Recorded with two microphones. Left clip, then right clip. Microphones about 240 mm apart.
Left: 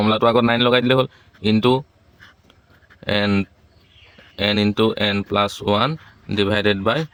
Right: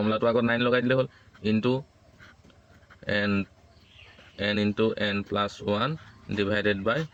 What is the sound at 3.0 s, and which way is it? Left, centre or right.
Speech, left.